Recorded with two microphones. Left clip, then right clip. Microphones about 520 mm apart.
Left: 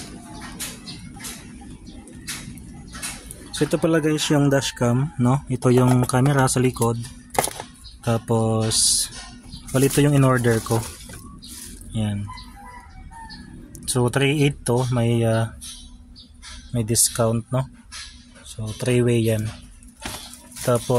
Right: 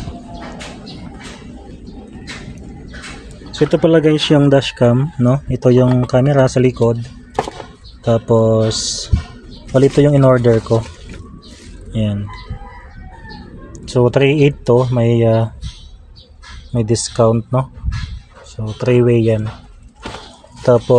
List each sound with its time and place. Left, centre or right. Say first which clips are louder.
3.5 s speech: right 8 dB; left
8.0 s speech: right 10 dB; left
11.9 s speech: right 8 dB; left
13.7 s speech: right 9 dB; left
16.7 s speech: right 7 dB; left
18.8 s speech: right 8 dB; left
20.6 s speech: right 10 dB; left